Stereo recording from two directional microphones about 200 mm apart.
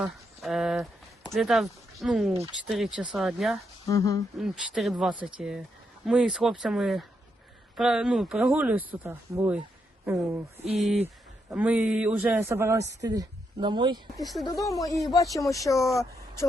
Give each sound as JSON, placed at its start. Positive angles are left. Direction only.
{"t": 0.0, "sound": "speech", "side_deg": 0}
{"t": 3.8, "sound": "speech", "side_deg": 15}
{"t": 4.4, "sound": "speech", "side_deg": 0}
{"t": 10.8, "sound": "a man's voice", "side_deg": 0}
{"t": 14.2, "sound": "speech", "side_deg": 0}
{"t": 15.0, "sound": "speech", "side_deg": 15}